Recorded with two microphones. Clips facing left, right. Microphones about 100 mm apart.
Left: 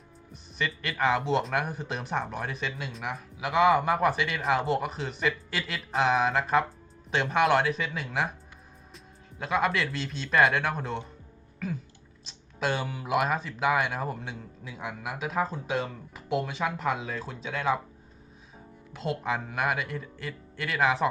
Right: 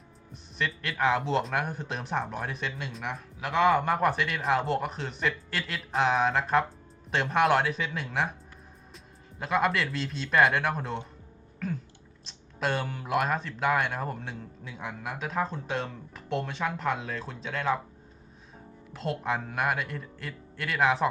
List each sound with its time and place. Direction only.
0.6 s speech: centre (ahead or behind)
9.4 s speech: centre (ahead or behind)
18.9 s speech: centre (ahead or behind)